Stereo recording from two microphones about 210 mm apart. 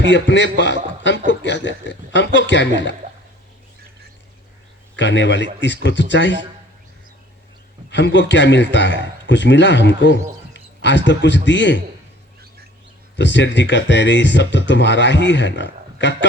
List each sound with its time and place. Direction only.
0.0 s speech: 60° left (ahead or behind)
4.9 s speech: 60° left (ahead or behind)
7.9 s a man's voice: 55° left (ahead or behind)
13.1 s speech: 60° left (ahead or behind)